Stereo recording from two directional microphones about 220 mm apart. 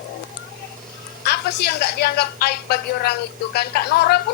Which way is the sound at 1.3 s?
45° left (ahead or behind).